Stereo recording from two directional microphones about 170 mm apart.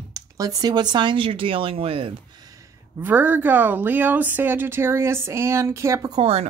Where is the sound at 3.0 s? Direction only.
10° right (ahead or behind).